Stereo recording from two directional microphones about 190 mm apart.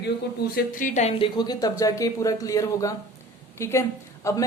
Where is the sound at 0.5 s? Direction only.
45° left (ahead or behind).